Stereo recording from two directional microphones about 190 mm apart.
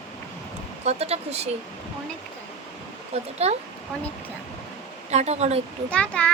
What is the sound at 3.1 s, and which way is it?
Speech, 35° right (ahead or behind).